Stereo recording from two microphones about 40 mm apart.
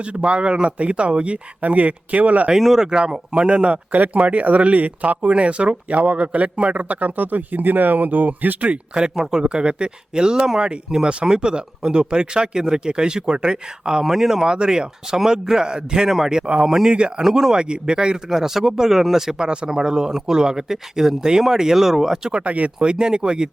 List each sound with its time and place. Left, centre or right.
0.0 s speech: right
2.6 s speech: centre
2.8 s speech: centre
3.9 s speech: right
9.0 s speech: centre
16.9 s speech: right
17.2 s speech: centre
18.3 s speech: centre
22.3 s speech: right